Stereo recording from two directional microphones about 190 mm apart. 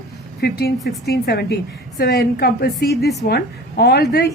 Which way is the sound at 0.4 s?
55° left (ahead or behind).